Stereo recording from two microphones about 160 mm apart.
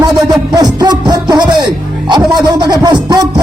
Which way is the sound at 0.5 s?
25° right (ahead or behind).